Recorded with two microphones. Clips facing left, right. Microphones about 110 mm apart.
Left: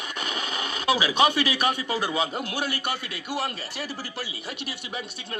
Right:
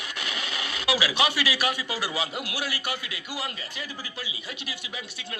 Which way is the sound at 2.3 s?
55° left (ahead or behind).